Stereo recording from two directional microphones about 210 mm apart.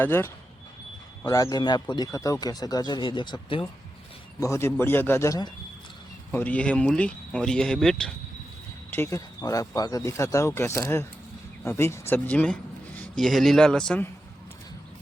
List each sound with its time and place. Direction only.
0.0 s speech: 10° left (ahead or behind)
6.3 s speech: 5° left (ahead or behind)